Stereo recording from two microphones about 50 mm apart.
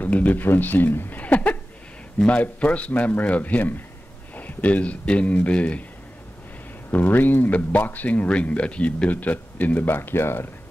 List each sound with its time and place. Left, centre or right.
0.0 s speech: left
1.2 s a sound: left
2.2 s speech: left
6.9 s speech: left
9.1 s speech: left